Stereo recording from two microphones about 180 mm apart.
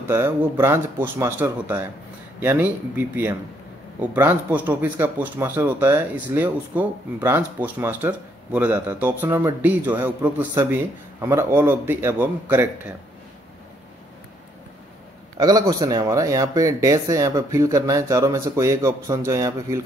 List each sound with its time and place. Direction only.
0.1 s speech: 15° right (ahead or behind)
15.3 s speech: 20° right (ahead or behind)